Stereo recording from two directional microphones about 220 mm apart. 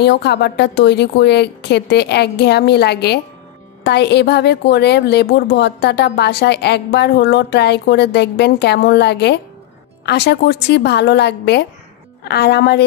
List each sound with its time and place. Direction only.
0.0 s a woman's voice: 50° left (ahead or behind)